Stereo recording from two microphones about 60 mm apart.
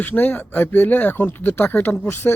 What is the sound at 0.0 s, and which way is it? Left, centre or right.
Speech, left.